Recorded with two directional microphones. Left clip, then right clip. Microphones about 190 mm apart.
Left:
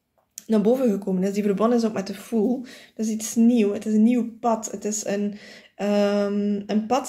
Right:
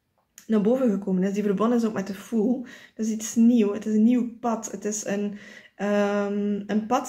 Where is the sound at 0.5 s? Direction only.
30° left (ahead or behind).